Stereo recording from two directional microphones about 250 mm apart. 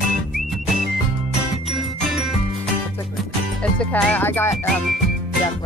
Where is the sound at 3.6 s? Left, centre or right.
Centre.